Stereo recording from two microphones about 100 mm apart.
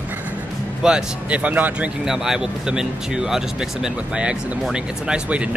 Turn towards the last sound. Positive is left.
turn(degrees=-10)  # may be behind; listen again after turning